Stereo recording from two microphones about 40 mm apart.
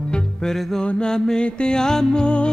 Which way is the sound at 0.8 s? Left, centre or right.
Left.